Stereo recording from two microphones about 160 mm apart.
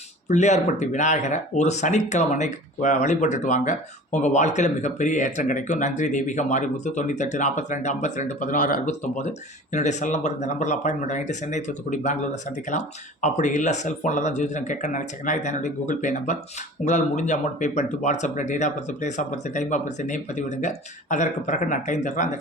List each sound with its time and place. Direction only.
0.3 s speech: 45° left (ahead or behind)